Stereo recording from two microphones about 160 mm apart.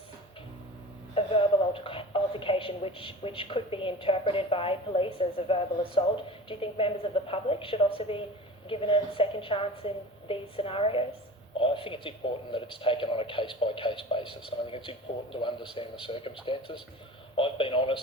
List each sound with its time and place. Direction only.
1.1 s a woman's voice: 35° left (ahead or behind)